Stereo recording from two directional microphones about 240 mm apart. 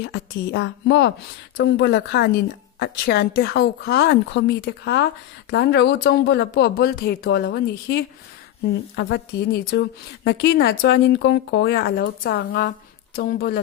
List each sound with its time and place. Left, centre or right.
0.0 s a woman's voice: left